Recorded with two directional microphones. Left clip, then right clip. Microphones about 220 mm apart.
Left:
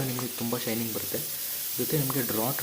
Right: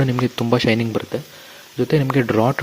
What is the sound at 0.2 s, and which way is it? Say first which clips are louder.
Speech: right 14 dB; 40° right (ahead or behind).